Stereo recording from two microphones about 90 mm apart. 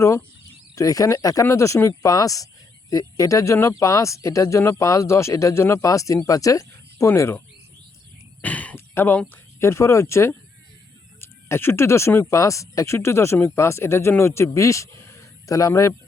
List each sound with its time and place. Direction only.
0.8 s speech: 40° left (ahead or behind)
8.4 s speech: 15° left (ahead or behind); by 16.0 s 35° left (ahead or behind)